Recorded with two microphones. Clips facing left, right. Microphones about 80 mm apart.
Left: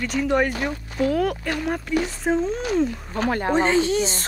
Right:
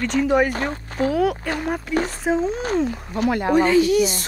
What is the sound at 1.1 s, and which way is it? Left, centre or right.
Speech, centre.